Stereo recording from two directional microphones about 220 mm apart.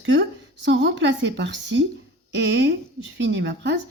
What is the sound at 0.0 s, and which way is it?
A woman's voice, 55° right (ahead or behind).